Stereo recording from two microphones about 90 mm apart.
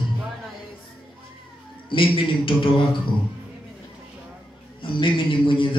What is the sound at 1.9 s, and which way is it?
Speech, 75° left (ahead or behind).